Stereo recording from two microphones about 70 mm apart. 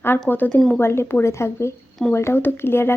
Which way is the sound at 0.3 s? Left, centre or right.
Left.